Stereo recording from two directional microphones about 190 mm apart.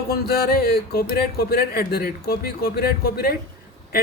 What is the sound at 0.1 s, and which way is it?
Speech, 55° left (ahead or behind).